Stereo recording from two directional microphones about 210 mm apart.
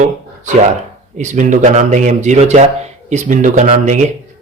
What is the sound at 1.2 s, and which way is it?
Speech, 35° right (ahead or behind).